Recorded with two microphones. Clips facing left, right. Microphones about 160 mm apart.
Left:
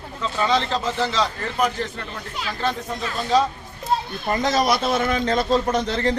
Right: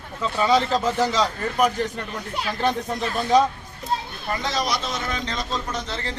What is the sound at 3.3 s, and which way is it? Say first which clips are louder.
Speech: right 1 dB; 20° right (ahead or behind).